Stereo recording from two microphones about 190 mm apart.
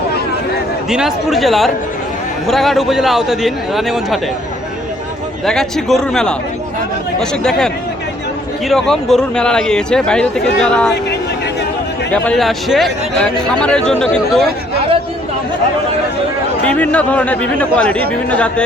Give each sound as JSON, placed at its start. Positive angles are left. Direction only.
{"t": 0.9, "sound": "a man's voice", "side_deg": -5}
{"t": 5.5, "sound": "a man's voice", "side_deg": 0}
{"t": 12.1, "sound": "a man's voice", "side_deg": 5}
{"t": 16.6, "sound": "a man's voice", "side_deg": 5}